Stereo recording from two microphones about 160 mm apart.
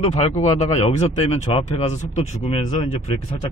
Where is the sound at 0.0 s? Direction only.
40° left (ahead or behind).